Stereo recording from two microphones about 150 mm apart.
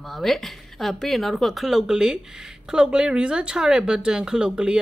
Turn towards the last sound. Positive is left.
turn(degrees=-5)  # may be behind; listen again after turning